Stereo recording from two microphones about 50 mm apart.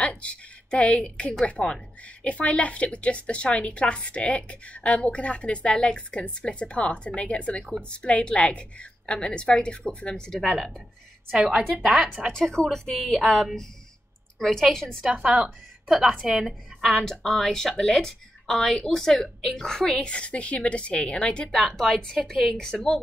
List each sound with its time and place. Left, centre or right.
0.0 s a sound: left
1.4 s a woman's voice: left
12.3 s speech: centre
15.0 s a woman's voice: centre; by 21.5 s left
21.5 s speech: centre